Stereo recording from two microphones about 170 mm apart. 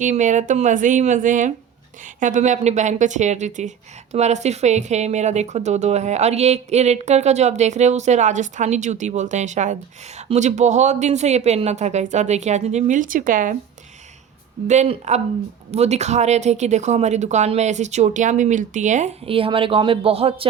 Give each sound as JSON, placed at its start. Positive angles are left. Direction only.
{"t": 0.0, "sound": "a woman's voice", "side_deg": -45}
{"t": 14.7, "sound": "a woman's voice", "side_deg": -45}